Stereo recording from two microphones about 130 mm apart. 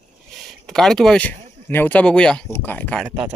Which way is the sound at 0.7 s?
5° left (ahead or behind).